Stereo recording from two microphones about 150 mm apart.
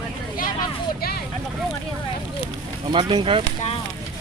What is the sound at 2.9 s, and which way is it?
Speech, 35° right (ahead or behind).